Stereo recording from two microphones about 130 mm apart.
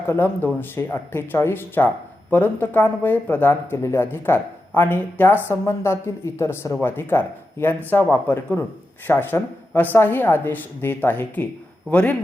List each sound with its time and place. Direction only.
0.1 s a woman's voice: 15° left (ahead or behind)